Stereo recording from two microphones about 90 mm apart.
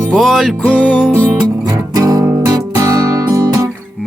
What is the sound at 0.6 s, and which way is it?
Music, 10° left (ahead or behind).